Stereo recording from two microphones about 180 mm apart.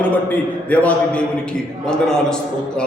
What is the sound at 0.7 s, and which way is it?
A man's voice, 10° left (ahead or behind).